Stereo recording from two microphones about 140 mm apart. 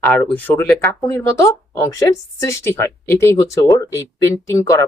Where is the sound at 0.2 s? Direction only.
10° left (ahead or behind).